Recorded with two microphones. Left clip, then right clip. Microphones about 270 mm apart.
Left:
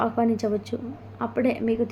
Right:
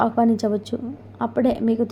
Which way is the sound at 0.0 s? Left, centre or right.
Centre.